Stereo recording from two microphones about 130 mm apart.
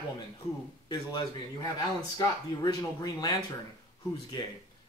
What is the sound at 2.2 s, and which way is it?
Speech, 30° left (ahead or behind).